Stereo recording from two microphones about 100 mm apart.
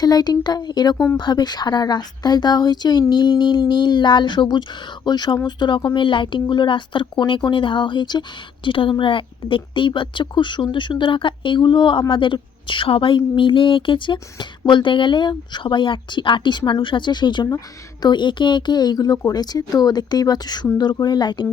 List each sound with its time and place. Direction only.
0.0 s speech: 40° left (ahead or behind)
8.6 s speech: 60° left (ahead or behind)